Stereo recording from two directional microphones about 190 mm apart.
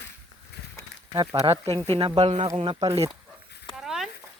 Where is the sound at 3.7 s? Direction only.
Centre (ahead or behind).